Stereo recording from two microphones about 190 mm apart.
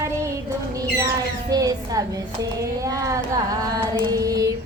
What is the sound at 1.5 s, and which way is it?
Music, 20° right (ahead or behind).